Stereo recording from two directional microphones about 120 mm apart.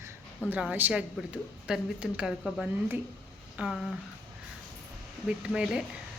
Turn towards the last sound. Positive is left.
turn(degrees=-5)  # may be behind; listen again after turning